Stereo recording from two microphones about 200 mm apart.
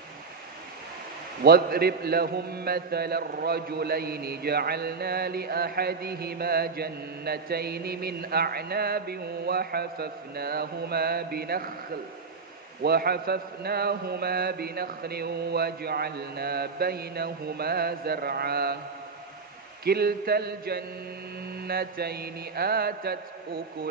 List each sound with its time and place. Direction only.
1.4 s a man's voice: 50° right (ahead or behind)
12.8 s a man's voice: 50° right (ahead or behind)
19.8 s a man's voice: 50° right (ahead or behind)